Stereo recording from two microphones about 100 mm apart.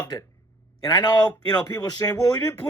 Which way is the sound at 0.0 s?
35° left (ahead or behind).